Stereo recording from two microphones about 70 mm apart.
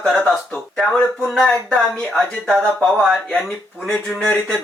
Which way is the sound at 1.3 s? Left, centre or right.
Centre.